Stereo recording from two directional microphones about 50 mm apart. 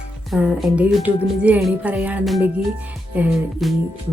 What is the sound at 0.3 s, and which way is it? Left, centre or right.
Speech, right.